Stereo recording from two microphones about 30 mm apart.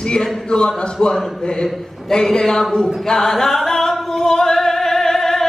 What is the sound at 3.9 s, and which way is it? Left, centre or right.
Singing, centre.